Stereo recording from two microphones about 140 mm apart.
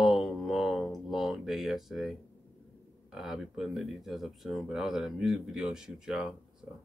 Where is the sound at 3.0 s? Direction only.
Centre (ahead or behind).